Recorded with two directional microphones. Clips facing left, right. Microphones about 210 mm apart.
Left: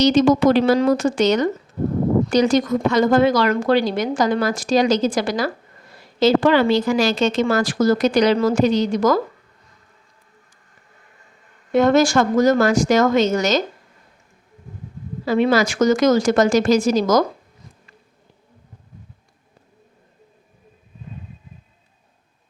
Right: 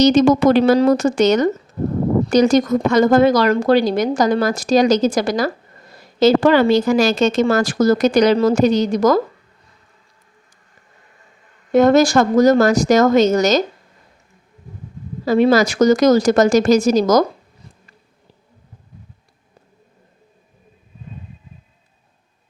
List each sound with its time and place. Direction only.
0.0 s a woman's voice: 45° right (ahead or behind)
11.7 s a woman's voice: 40° right (ahead or behind)
15.2 s a woman's voice: 40° right (ahead or behind)